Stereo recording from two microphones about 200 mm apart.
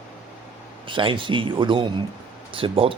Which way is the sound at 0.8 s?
25° right (ahead or behind).